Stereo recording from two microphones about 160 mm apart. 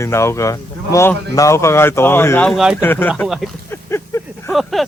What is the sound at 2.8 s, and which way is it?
Speech, 10° left (ahead or behind).